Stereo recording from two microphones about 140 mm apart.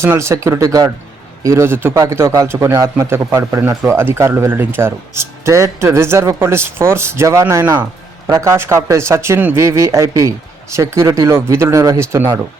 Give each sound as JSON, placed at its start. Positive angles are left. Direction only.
{"t": 0.0, "sound": "a man's voice", "side_deg": -20}